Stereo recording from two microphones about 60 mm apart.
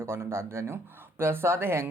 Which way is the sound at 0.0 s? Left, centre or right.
Right.